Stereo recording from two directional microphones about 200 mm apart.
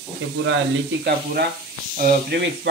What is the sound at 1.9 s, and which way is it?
Speech, 50° right (ahead or behind).